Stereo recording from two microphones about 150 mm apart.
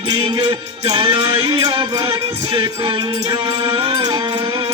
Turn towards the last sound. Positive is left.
turn(degrees=-30)  # may be behind; listen again after turning